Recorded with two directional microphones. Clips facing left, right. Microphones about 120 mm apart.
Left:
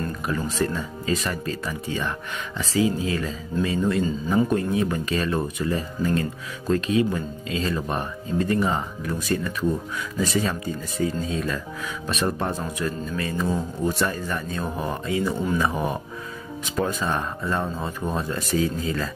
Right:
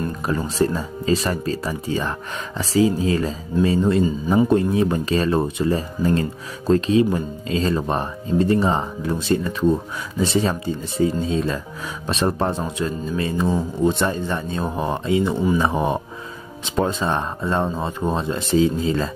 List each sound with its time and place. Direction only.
0.5 s speech: 35° right (ahead or behind)